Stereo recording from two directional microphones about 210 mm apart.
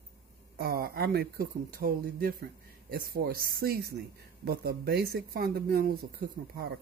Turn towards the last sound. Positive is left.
turn(degrees=-45)  # may be behind; listen again after turning